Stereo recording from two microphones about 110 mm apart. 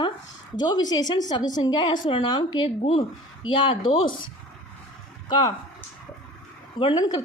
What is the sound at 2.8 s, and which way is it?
Speech, 65° left (ahead or behind).